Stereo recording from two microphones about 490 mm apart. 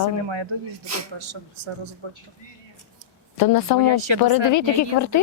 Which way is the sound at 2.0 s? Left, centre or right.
Right.